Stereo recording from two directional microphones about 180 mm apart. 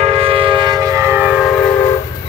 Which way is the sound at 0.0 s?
30° right (ahead or behind).